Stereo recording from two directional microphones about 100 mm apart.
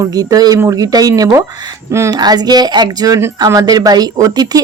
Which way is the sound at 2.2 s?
45° right (ahead or behind).